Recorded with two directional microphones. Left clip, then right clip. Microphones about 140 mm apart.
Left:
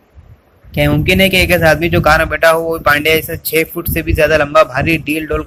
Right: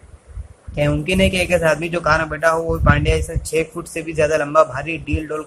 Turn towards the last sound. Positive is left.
turn(degrees=25)  # may be behind; listen again after turning